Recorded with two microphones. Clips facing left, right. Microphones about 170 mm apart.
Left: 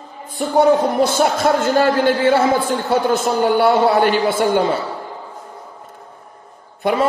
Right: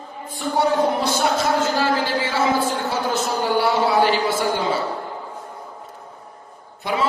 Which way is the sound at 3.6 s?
55° left (ahead or behind).